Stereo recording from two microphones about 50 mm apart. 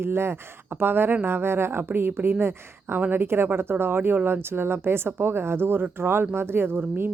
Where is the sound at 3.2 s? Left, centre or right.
Right.